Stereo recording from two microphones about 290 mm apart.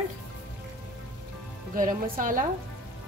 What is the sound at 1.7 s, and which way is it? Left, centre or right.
Speech, right.